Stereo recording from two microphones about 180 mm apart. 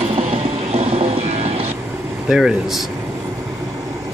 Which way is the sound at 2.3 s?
Centre (ahead or behind).